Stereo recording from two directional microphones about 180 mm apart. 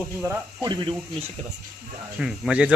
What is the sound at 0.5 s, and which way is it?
Speech, 25° right (ahead or behind).